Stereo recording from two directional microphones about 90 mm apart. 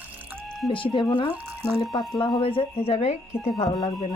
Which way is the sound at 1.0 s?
60° left (ahead or behind).